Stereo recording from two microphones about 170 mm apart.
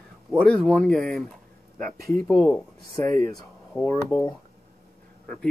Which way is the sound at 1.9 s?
65° right (ahead or behind).